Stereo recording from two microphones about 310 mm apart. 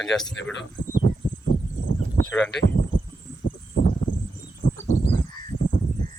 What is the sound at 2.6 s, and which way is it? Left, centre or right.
Speech, left.